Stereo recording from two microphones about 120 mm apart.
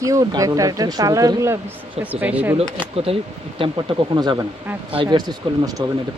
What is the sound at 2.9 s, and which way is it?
Speech, 55° right (ahead or behind).